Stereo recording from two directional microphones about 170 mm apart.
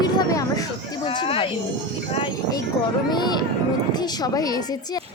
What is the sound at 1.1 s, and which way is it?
Speech, 35° left (ahead or behind).